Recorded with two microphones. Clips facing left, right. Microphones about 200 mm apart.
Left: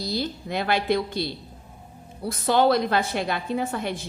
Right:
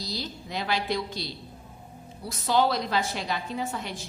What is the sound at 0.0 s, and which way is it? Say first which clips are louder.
A woman's voice: left 7 dB; 55° left (ahead or behind).